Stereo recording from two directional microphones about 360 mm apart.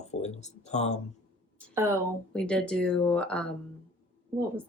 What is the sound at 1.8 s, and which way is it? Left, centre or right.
Speech, centre.